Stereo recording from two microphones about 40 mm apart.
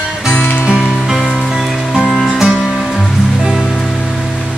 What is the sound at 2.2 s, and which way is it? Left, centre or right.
Music, centre.